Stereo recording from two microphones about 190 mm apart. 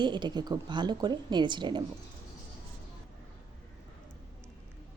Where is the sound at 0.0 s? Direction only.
25° right (ahead or behind).